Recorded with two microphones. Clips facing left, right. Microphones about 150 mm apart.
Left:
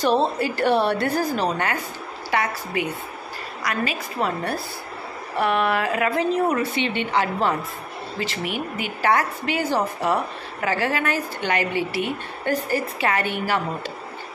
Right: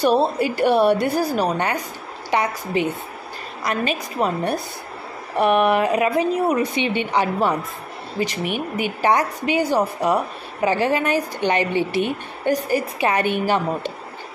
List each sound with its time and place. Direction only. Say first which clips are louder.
0.0 s a woman's voice: right 3 dB; 10° right (ahead or behind)